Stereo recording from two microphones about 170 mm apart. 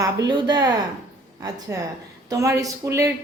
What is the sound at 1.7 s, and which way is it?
A woman's voice, 20° right (ahead or behind).